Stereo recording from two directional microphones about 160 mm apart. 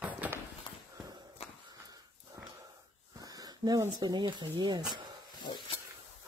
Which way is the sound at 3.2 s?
20° right (ahead or behind).